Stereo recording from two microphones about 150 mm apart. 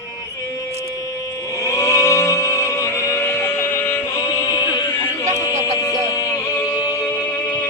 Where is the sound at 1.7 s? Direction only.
20° left (ahead or behind).